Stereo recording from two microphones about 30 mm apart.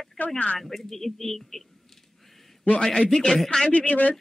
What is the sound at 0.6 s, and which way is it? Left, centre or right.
Speech, centre.